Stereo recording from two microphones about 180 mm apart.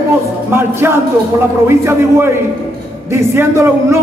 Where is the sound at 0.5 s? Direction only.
15° right (ahead or behind).